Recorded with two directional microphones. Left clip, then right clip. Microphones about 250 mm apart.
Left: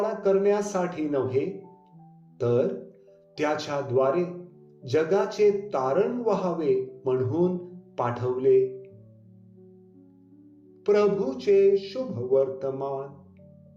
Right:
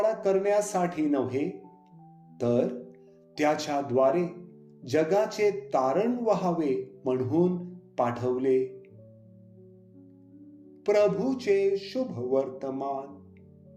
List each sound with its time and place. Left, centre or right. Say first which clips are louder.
0.0 s speech: left 2 dB; right
10.8 s speech: left 1 dB; right